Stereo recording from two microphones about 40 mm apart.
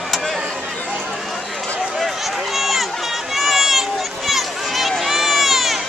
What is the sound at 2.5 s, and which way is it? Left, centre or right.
Run, centre.